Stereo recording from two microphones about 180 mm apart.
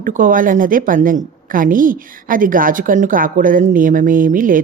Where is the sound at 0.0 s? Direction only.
50° right (ahead or behind).